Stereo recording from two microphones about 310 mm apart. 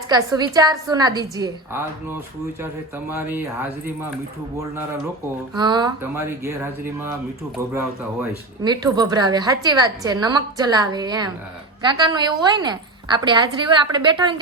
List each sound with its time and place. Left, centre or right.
0.1 s a woman's voice: centre
5.5 s a woman's voice: centre